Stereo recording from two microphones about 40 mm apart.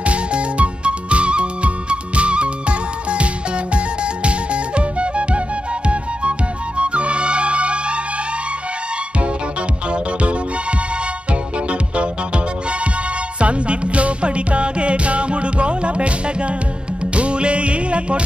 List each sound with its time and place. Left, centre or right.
0.0 s music: right
6.8 s music: right
9.8 s music: right
13.4 s music: right